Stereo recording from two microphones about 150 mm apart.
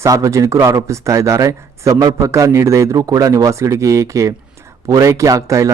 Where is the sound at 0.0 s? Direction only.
20° right (ahead or behind).